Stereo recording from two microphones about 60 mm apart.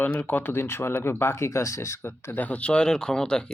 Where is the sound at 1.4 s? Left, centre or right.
Left.